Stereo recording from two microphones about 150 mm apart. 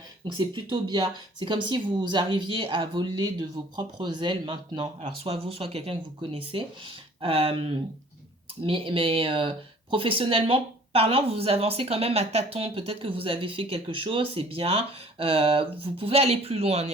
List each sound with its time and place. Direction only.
0.3 s speech: 30° right (ahead or behind)
8.6 s speech: 35° right (ahead or behind)